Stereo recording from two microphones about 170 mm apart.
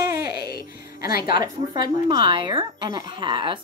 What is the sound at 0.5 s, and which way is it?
Speech, 65° left (ahead or behind).